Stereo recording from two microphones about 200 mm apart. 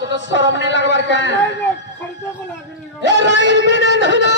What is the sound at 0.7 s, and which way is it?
Speech, 65° left (ahead or behind).